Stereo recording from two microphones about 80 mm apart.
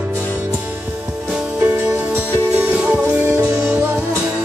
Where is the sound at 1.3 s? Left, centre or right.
Centre.